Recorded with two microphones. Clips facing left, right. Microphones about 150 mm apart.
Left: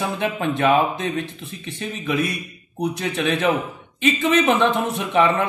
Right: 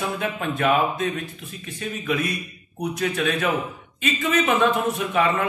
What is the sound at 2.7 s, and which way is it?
Speech, 25° left (ahead or behind).